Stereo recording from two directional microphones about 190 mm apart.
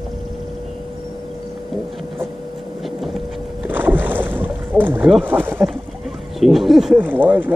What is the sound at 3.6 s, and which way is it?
Boat, 10° right (ahead or behind).